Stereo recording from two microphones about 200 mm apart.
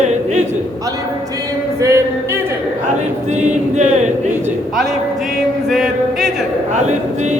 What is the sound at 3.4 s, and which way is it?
Speech, 35° right (ahead or behind).